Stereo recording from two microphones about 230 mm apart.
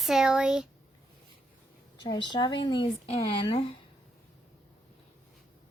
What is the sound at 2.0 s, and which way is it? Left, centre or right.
A woman's voice, left.